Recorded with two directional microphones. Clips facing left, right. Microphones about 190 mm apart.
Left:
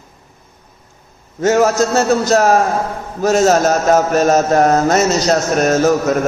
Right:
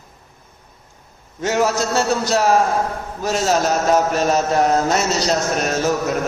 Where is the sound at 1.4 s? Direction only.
45° left (ahead or behind).